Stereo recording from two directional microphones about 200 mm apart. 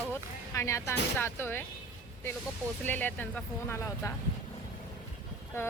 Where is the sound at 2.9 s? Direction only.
10° left (ahead or behind).